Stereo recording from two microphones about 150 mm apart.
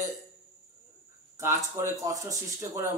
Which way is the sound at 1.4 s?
15° right (ahead or behind).